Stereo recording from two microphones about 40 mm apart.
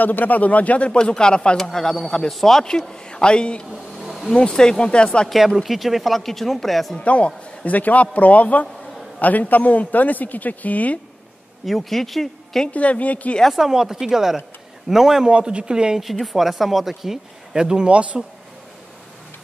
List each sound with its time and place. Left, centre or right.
0.0 s a man's voice: left
0.9 s a man's voice: centre
1.6 s a man's voice: centre
4.0 s a sound: centre
4.3 s a man's voice: centre
5.6 s speech: centre
7.0 s a man's voice: left
11.6 s speech: centre
12.7 s a man's voice: left
13.6 s speech: centre
15.3 s speech: right
16.0 s speech: centre
17.8 s speech: right